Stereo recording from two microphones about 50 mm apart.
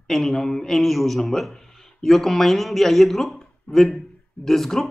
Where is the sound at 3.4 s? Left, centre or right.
Centre.